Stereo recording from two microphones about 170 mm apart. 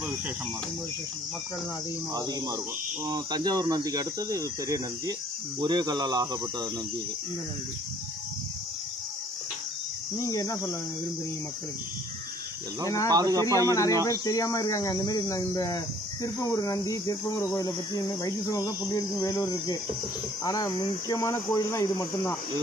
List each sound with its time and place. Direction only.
2.1 s speech: 20° right (ahead or behind)
10.1 s speech: 20° left (ahead or behind)
13.1 s speech: 20° right (ahead or behind)
13.7 s speech: 20° left (ahead or behind)